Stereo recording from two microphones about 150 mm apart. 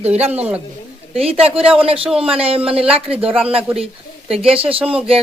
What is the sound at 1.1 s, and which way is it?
Speech, 40° right (ahead or behind).